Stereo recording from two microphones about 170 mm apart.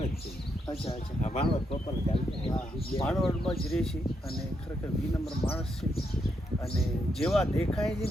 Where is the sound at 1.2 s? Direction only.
45° left (ahead or behind).